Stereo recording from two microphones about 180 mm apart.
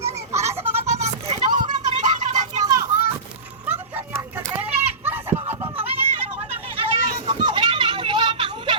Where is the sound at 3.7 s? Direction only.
10° right (ahead or behind).